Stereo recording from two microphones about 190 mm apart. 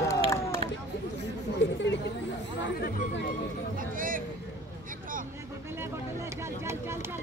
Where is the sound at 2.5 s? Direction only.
55° left (ahead or behind).